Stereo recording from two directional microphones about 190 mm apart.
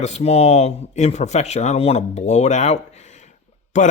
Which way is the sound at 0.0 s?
35° left (ahead or behind).